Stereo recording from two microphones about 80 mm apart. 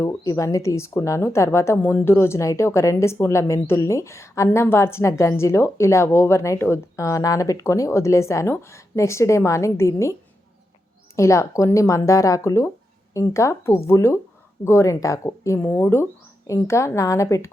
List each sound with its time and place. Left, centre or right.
0.0 s a woman's voice: left
11.2 s a woman's voice: left
15.6 s a woman's voice: left